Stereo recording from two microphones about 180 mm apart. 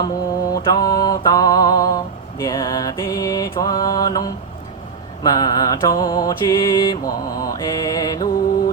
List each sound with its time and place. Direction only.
0.5 s mantra: 20° left (ahead or behind)